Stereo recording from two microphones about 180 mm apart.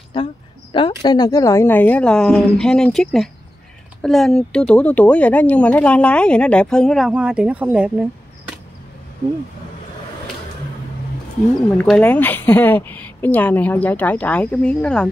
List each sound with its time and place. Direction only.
0.1 s a woman's voice: 30° left (ahead or behind); by 8.1 s 5° right (ahead or behind)
11.8 s a woman's voice: 10° left (ahead or behind)